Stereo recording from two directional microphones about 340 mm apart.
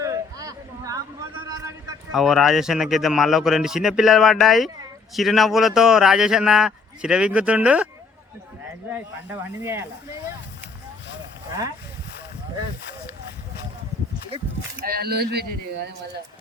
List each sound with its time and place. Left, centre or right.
0.0 s a sound: centre
1.5 s speech: centre
8.9 s speech: centre
14.8 s speech: right